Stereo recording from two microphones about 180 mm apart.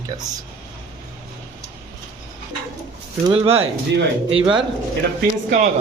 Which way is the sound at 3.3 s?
35° right (ahead or behind).